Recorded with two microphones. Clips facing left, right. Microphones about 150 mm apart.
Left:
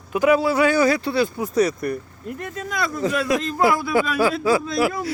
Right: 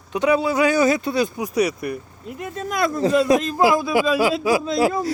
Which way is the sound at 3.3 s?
20° right (ahead or behind).